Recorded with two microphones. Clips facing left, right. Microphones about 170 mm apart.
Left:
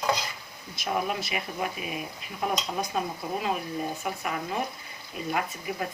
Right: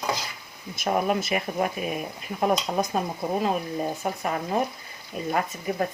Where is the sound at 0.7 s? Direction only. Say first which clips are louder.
Right 5 dB; 50° right (ahead or behind).